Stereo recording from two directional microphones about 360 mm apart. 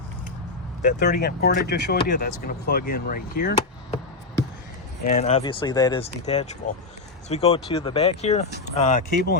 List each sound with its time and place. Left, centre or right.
0.8 s speech: left
5.0 s speech: centre